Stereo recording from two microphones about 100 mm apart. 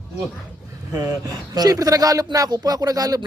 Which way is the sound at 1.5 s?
40° right (ahead or behind).